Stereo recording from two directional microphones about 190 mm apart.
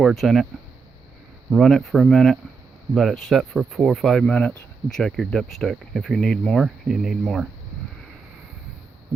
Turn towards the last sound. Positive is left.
turn(degrees=0)  # may be behind; listen again after turning